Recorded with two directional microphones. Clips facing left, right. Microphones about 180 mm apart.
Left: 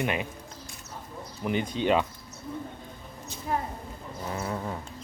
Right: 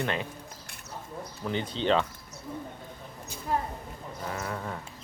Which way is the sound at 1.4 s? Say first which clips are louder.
Left 3 dB; 15° left (ahead or behind).